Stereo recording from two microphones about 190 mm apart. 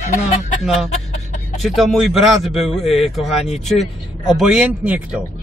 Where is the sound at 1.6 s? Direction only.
Centre (ahead or behind).